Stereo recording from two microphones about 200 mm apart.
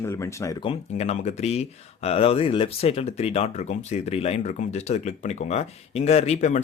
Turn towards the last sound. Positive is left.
turn(degrees=35)  # may be behind; listen again after turning